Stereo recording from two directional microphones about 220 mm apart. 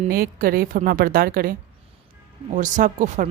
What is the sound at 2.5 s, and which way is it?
Speech, 35° right (ahead or behind).